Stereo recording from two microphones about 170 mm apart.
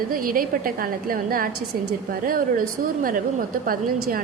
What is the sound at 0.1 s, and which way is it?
A woman's voice, 55° right (ahead or behind).